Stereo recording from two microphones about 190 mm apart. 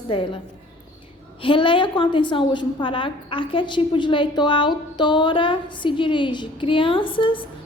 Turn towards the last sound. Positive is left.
turn(degrees=25)  # may be behind; listen again after turning